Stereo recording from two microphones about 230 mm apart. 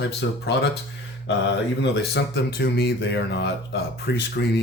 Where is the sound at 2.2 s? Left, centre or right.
Left.